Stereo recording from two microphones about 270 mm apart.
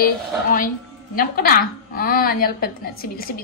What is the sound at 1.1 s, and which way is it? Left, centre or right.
A woman's voice, left.